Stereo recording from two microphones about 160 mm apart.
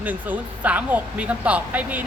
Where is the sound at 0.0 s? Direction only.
10° right (ahead or behind).